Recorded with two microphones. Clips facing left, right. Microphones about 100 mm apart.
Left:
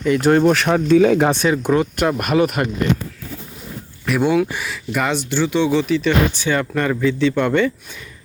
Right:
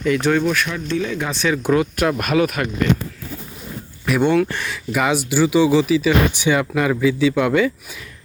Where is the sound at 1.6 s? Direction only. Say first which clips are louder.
Even; 5° right (ahead or behind).